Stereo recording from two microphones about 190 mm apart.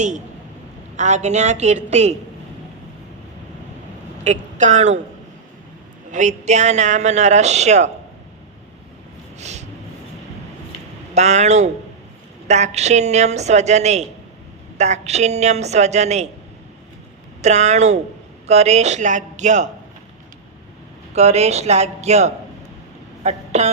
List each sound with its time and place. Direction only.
0.9 s speech: 35° right (ahead or behind)
4.2 s a woman's voice: 40° right (ahead or behind)
6.1 s speech: 40° right (ahead or behind)
9.4 s a sound: 35° right (ahead or behind)
11.1 s speech: 35° right (ahead or behind)
17.4 s speech: 35° right (ahead or behind)
21.2 s a woman's voice: 35° right (ahead or behind)